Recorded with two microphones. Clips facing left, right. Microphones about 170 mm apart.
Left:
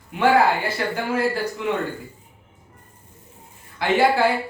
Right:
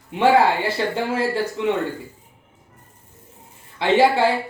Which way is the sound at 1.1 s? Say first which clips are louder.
Right 1 dB; 25° right (ahead or behind).